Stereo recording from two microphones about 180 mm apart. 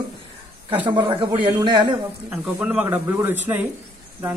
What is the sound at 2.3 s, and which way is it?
Speech, 5° right (ahead or behind).